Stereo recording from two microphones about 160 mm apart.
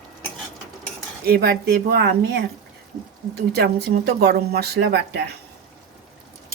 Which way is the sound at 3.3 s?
80° right.